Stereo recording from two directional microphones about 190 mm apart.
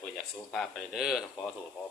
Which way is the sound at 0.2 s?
Centre (ahead or behind).